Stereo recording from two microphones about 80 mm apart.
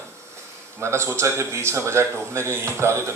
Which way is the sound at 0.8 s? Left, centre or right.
Right.